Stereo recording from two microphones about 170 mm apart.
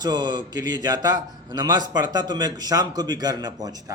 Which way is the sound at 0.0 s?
25° right (ahead or behind).